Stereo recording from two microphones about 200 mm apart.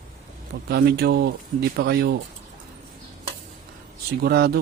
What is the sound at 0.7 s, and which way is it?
Speech, 50° right (ahead or behind).